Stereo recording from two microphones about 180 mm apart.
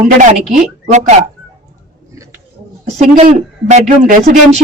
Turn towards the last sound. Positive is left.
turn(degrees=-40)  # may be behind; listen again after turning